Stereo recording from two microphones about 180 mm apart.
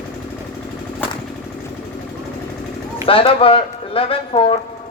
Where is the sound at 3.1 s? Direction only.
30° left (ahead or behind).